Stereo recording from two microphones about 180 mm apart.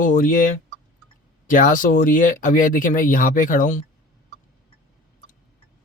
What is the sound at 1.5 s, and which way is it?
Speech, 50° left (ahead or behind).